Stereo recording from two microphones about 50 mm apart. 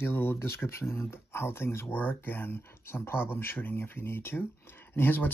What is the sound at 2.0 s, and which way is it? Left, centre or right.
Speech, left.